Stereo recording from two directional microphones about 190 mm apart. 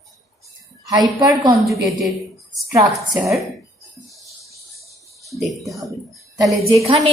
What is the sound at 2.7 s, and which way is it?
Speech, 15° right (ahead or behind).